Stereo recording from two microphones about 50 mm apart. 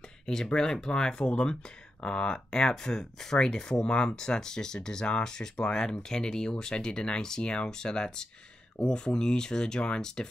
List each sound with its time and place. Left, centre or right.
0.3 s speech: centre